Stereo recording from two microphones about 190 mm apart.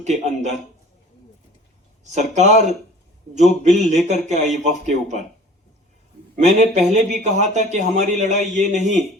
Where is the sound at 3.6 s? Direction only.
40° right (ahead or behind).